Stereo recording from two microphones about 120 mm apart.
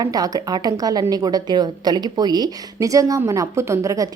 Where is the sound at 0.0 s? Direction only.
30° right (ahead or behind).